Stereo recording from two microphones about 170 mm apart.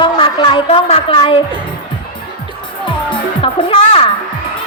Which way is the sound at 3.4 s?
35° left (ahead or behind).